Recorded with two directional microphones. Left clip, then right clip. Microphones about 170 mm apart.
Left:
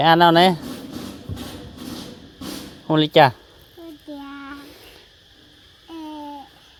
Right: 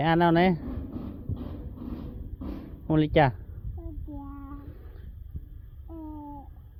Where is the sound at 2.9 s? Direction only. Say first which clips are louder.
Left 9 dB; 15° left (ahead or behind).